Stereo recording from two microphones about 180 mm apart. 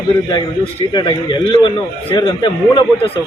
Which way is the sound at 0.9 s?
25° left (ahead or behind).